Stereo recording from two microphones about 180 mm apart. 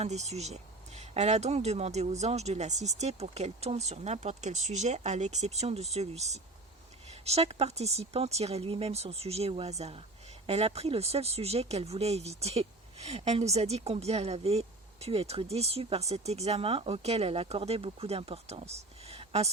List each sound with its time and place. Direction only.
0.0 s speech: 40° right (ahead or behind)